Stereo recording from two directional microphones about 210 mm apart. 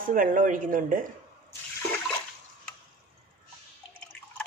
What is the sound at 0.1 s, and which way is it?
Speech, 40° right (ahead or behind).